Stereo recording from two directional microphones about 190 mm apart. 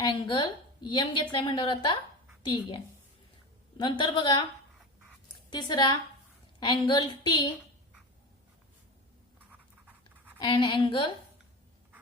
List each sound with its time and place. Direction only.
0.0 s a woman's voice: 25° left (ahead or behind)
5.5 s a woman's voice: 20° left (ahead or behind)
9.5 s dog: 10° right (ahead or behind)
10.4 s a woman's voice: 25° left (ahead or behind)